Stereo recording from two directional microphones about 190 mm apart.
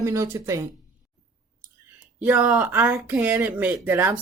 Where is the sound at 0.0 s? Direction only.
15° right (ahead or behind).